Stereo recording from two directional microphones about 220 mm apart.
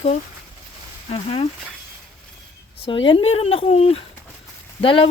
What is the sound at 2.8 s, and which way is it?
Speech, 20° left (ahead or behind).